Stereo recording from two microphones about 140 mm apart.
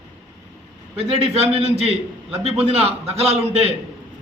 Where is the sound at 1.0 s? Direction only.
45° right (ahead or behind).